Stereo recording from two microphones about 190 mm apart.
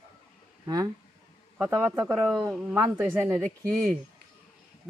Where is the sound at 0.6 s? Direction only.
20° right (ahead or behind).